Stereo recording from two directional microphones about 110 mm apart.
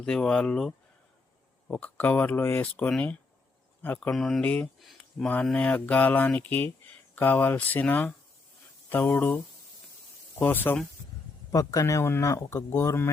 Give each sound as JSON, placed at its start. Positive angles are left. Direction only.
{"t": 0.0, "sound": "speech", "side_deg": 5}
{"t": 4.1, "sound": "speech", "side_deg": 5}
{"t": 4.8, "sound": "a sound", "side_deg": 0}
{"t": 5.5, "sound": "speech", "side_deg": 10}
{"t": 11.5, "sound": "speech", "side_deg": 30}